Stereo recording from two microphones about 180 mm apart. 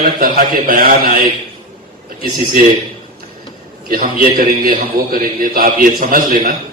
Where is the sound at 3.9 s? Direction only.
55° right (ahead or behind).